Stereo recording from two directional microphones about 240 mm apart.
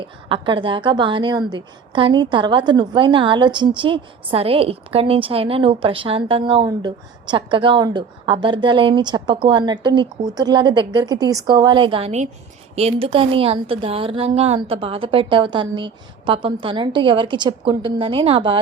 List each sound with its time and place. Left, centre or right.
0.3 s a woman's voice: right